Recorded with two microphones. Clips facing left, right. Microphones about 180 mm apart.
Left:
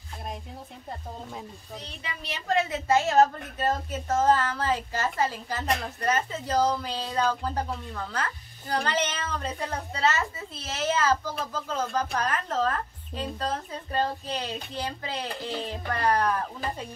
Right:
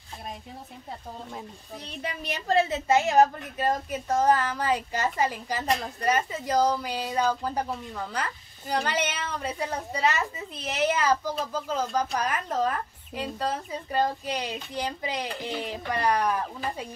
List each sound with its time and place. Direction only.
2.0 s speech: 50° right (ahead or behind)
2.4 s a woman's voice: 30° right (ahead or behind)
2.9 s a woman's voice: 15° right (ahead or behind)